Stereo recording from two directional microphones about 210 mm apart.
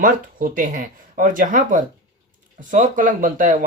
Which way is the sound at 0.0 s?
40° right (ahead or behind).